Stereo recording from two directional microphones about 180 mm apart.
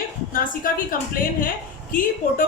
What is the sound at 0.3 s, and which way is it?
Speech, 50° left (ahead or behind).